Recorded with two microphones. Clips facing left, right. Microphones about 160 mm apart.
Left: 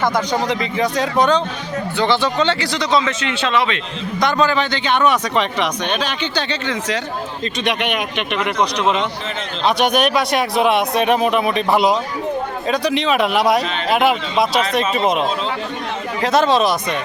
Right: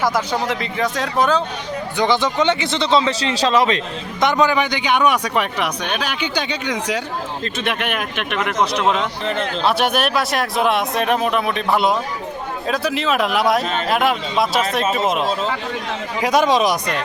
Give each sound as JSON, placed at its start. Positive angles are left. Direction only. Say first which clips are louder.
{"t": 0.0, "sound": "a man's voice", "louder": "left 1 dB", "side_deg": -5}
{"t": 2.0, "sound": "speech", "louder": "even", "side_deg": -15}
{"t": 4.2, "sound": "a man's voice", "louder": "right 1 dB", "side_deg": -20}
{"t": 16.2, "sound": "speech", "louder": "left 1 dB", "side_deg": -10}